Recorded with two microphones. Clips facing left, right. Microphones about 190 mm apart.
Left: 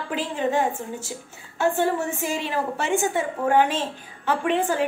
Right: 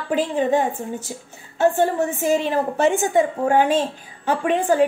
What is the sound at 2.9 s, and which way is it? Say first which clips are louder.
A woman's voice: right 6 dB; 20° right (ahead or behind).